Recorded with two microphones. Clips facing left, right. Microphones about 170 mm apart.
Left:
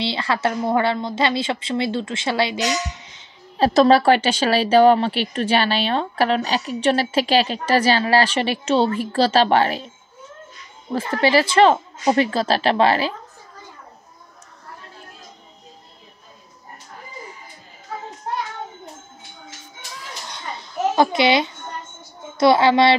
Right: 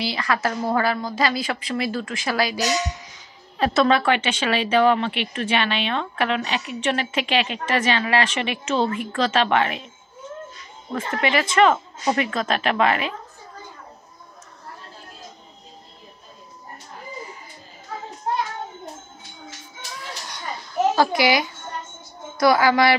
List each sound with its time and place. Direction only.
0.0 s a woman's voice: 25° left (ahead or behind)
10.9 s speech: 30° left (ahead or behind)
20.9 s a woman's voice: 20° left (ahead or behind)